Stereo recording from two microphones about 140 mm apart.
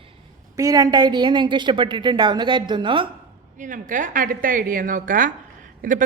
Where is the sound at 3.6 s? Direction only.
70° right (ahead or behind).